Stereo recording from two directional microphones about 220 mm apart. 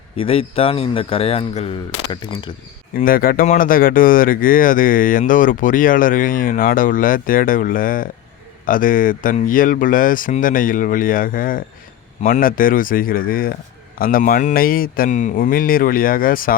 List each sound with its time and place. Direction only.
0.2 s speech: 25° left (ahead or behind)
2.9 s speech: 40° left (ahead or behind)